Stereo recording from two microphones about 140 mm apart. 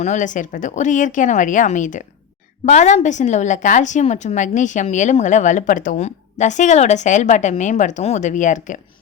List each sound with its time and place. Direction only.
0.0 s a woman's voice: 60° left (ahead or behind)